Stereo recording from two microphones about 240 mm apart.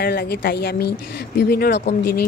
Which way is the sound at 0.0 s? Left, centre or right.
Left.